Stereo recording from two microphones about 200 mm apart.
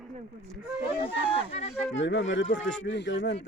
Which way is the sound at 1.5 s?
30° left (ahead or behind).